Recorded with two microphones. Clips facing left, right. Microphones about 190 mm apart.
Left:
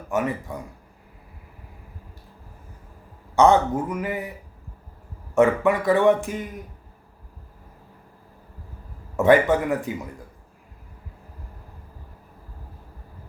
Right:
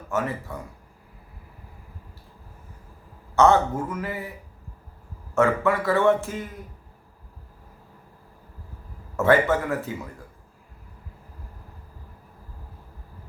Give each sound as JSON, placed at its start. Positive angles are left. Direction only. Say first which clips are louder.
{"t": 0.1, "sound": "a man's voice", "louder": "left 2 dB", "side_deg": 15}
{"t": 3.3, "sound": "a man's voice", "louder": "left 1 dB", "side_deg": 15}
{"t": 5.3, "sound": "a man's voice", "louder": "left 3 dB", "side_deg": 15}
{"t": 9.1, "sound": "a man's voice", "louder": "left 3 dB", "side_deg": 15}